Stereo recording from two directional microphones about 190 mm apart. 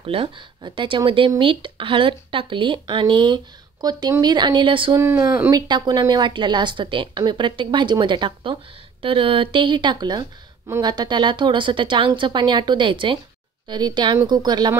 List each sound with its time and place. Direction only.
0.0 s a woman's voice: 30° right (ahead or behind)